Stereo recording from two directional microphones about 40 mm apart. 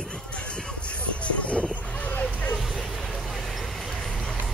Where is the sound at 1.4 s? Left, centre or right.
Left.